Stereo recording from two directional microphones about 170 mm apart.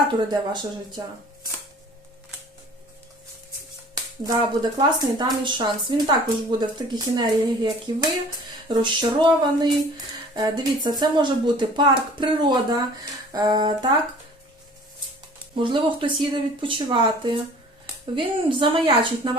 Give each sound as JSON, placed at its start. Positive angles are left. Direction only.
{"t": 0.3, "sound": "speech", "side_deg": -25}
{"t": 3.9, "sound": "speech", "side_deg": -25}
{"t": 15.5, "sound": "speech", "side_deg": -30}